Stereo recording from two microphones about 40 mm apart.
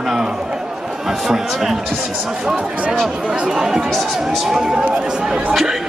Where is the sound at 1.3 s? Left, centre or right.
Centre.